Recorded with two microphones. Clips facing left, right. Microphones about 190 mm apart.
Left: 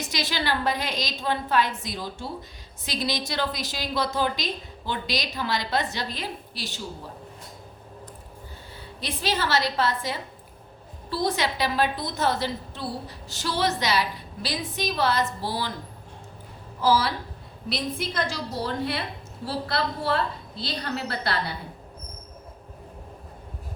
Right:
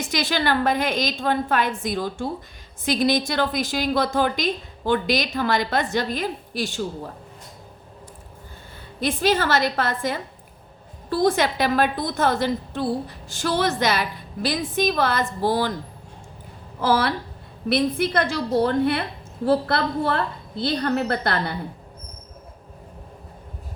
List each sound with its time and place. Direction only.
0.1 s a woman's voice: 50° right (ahead or behind)
9.0 s a woman's voice: 50° right (ahead or behind)
16.8 s a woman's voice: 55° right (ahead or behind)